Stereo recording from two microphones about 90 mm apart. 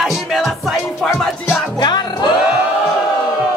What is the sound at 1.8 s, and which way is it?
Music, 55° left (ahead or behind).